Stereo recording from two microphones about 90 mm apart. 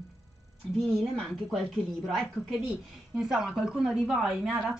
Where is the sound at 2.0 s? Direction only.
Centre (ahead or behind).